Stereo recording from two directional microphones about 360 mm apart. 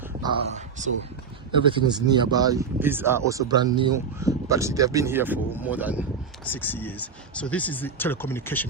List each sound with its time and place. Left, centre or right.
0.2 s speech: centre